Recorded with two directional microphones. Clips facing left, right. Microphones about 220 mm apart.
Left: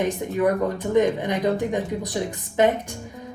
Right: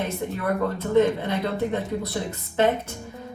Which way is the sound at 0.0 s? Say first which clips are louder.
Left 6 dB; 15° left (ahead or behind).